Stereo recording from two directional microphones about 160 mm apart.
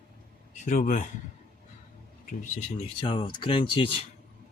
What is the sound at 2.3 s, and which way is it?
Speech, 55° left (ahead or behind).